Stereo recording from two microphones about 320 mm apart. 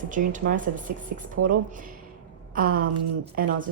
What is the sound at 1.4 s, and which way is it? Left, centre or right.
Speech, right.